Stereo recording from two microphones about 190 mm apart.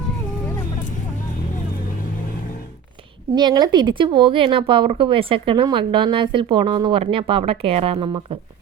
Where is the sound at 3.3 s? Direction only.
20° right (ahead or behind).